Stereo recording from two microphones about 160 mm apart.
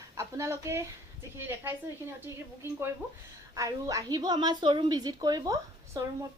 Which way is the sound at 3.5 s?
20° right (ahead or behind).